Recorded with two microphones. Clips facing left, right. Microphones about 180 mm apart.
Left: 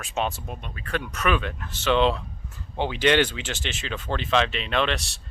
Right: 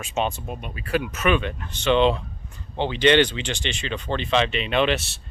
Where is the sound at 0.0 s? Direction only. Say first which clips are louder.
Right 2 dB; centre (ahead or behind).